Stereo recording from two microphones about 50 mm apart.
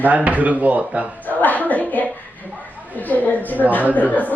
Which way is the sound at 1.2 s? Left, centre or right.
Left.